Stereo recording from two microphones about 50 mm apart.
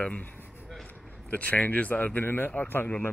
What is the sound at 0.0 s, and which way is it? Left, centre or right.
Speech, left.